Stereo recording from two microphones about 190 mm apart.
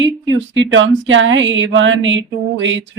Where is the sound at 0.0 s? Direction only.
75° right (ahead or behind).